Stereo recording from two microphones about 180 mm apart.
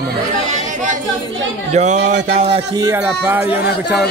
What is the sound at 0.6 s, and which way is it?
A man's voice, 45° right (ahead or behind).